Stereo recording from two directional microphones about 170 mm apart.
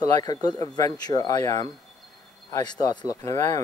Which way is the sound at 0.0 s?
20° left (ahead or behind).